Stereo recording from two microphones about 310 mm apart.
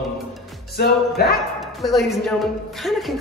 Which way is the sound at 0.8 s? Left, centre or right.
Left.